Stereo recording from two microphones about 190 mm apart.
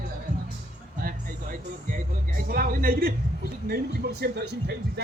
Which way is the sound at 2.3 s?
50° right (ahead or behind).